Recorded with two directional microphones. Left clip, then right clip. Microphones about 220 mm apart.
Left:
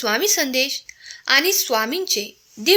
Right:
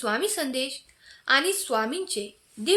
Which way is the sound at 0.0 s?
30° left (ahead or behind).